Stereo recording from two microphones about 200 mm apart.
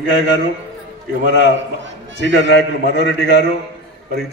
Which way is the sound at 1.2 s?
65° left (ahead or behind).